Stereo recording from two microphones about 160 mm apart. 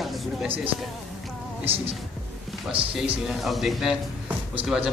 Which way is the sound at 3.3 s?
Centre (ahead or behind).